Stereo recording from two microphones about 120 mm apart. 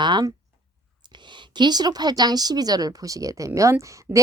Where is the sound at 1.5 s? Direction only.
35° right (ahead or behind).